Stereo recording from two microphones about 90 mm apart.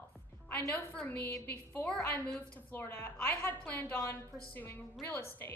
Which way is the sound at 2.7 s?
25° left (ahead or behind).